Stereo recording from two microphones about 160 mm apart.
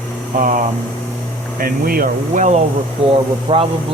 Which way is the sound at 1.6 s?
65° right (ahead or behind).